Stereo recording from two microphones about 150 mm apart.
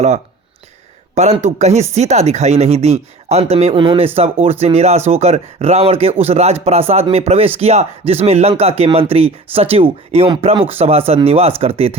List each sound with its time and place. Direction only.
1.1 s speech: 50° right (ahead or behind)